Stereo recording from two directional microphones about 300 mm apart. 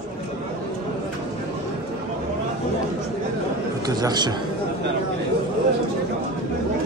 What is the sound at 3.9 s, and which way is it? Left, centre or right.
Speech, centre.